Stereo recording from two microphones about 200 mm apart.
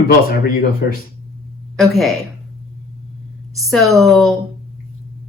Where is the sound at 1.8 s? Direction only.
Centre (ahead or behind).